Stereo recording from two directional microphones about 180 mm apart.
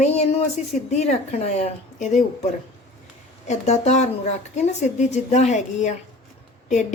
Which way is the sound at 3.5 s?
40° left (ahead or behind).